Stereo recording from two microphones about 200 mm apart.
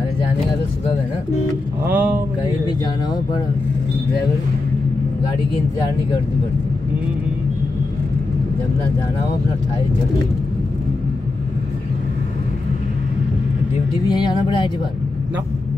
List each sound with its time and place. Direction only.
1.9 s speech: 10° right (ahead or behind)
14.0 s speech: 20° left (ahead or behind)